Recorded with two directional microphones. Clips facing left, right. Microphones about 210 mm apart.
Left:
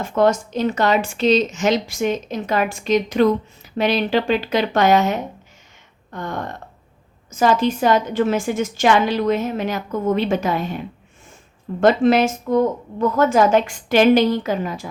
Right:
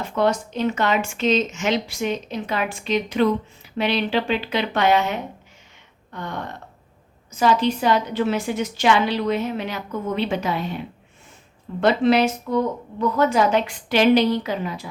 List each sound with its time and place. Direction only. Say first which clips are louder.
0.0 s speech: left 4 dB; 45° left (ahead or behind)
6.1 s a sound: left 3 dB; 45° left (ahead or behind)
7.3 s speech: left 2 dB; 45° left (ahead or behind)
11.8 s speech: left 3 dB; 45° left (ahead or behind)